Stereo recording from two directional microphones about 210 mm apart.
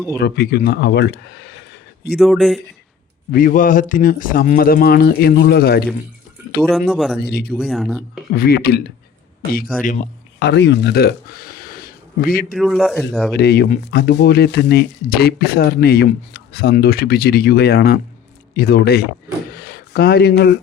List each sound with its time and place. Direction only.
0.2 s speech: 50° left (ahead or behind)
2.1 s speech: centre (ahead or behind)
3.3 s speech: 40° left (ahead or behind)
6.6 s speech: centre (ahead or behind)
7.2 s speech: 50° left (ahead or behind)
7.6 s speech: centre (ahead or behind)
8.3 s speech: 45° left (ahead or behind)
9.8 s a man's voice: 40° left (ahead or behind)
10.4 s speech: 55° left (ahead or behind)
12.5 s speech: centre (ahead or behind)
13.3 s speech: 50° left (ahead or behind)
19.5 s a sound: 45° left (ahead or behind)